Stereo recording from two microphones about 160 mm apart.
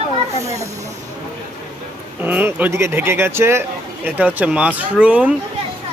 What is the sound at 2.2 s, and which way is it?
Speech, 10° right (ahead or behind).